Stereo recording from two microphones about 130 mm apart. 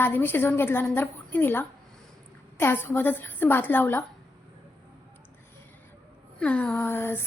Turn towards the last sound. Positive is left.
turn(degrees=15)  # may be behind; listen again after turning